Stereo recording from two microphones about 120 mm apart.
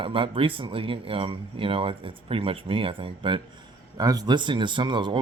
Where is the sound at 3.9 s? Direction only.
30° right (ahead or behind).